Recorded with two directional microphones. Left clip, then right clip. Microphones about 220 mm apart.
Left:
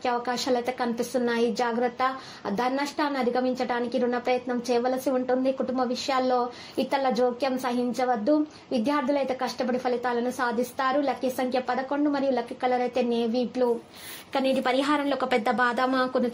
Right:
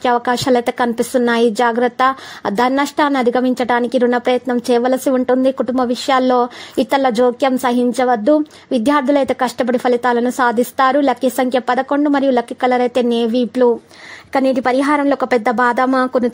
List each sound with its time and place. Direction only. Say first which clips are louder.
0.0 s a woman's voice: right 12 dB; 45° right (ahead or behind)